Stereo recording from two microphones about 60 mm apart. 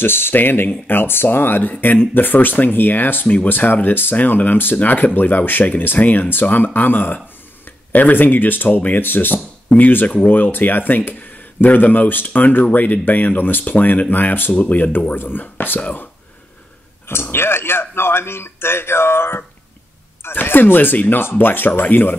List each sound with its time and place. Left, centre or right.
0.0 s speech: left
17.1 s speech: left